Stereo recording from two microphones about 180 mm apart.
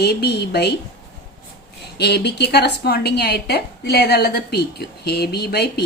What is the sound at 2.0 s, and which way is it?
A woman's voice, 65° left (ahead or behind).